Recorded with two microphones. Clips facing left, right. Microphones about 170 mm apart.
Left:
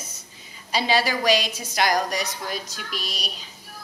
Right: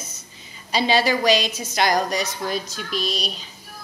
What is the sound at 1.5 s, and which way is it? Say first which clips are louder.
A woman's voice: right 2 dB; 25° right (ahead or behind).